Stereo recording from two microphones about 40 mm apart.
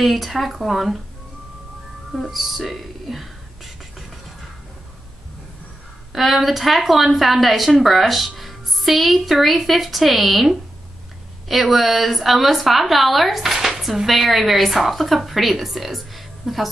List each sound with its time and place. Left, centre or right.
0.0 s speech: centre
2.3 s speech: centre
6.1 s speech: centre